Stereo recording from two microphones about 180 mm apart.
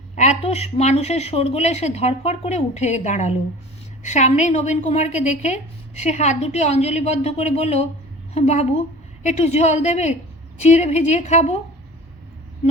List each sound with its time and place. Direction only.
0.2 s a woman's voice: 35° left (ahead or behind)